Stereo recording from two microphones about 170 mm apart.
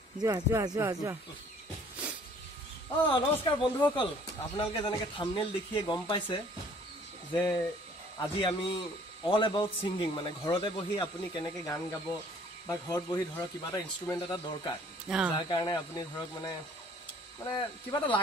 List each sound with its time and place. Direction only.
0.2 s speech: 20° right (ahead or behind)
3.0 s a man's voice: 30° left (ahead or behind)
4.6 s a man's voice: 30° left (ahead or behind)
15.0 s speech: 5° right (ahead or behind)
15.3 s a man's voice: 25° left (ahead or behind)